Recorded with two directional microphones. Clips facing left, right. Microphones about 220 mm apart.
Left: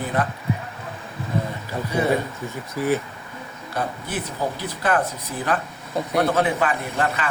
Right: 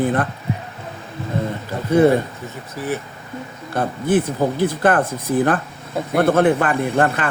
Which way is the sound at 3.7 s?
50° right (ahead or behind).